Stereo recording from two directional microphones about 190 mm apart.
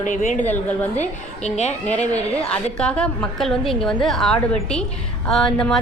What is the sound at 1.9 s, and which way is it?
A woman's voice, 5° left (ahead or behind).